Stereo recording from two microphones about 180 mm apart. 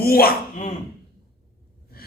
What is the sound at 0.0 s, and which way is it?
Speech, 55° left (ahead or behind).